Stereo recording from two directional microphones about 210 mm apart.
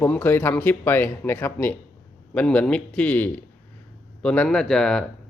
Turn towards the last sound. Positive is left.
turn(degrees=0)  # may be behind; listen again after turning